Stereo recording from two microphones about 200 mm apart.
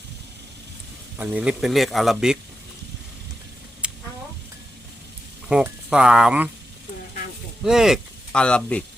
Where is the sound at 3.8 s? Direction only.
5° right (ahead or behind).